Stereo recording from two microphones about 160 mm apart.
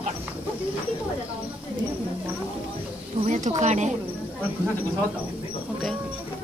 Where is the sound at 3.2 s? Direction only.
45° right (ahead or behind).